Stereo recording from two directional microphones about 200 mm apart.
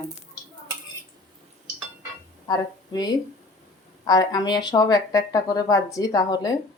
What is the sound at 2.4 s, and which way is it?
Speech, 20° left (ahead or behind).